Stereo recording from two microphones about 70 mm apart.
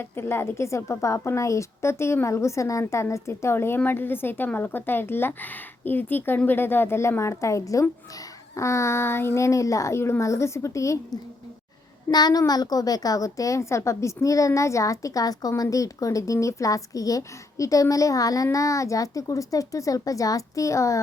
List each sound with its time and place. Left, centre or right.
0.0 s a woman's voice: left
12.1 s a child's voice: left
12.4 s a woman's voice: left